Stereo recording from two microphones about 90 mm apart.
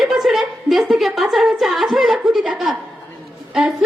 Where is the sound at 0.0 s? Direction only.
5° right (ahead or behind).